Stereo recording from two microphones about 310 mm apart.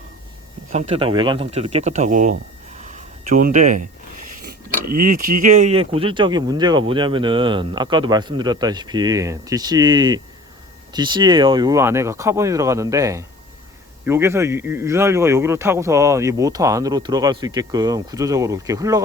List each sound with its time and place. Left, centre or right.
0.7 s speech: centre
2.8 s a sound: right
4.9 s a man's voice: right; by 19.0 s centre